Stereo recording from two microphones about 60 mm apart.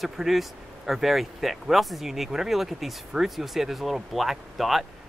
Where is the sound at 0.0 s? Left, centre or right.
Centre.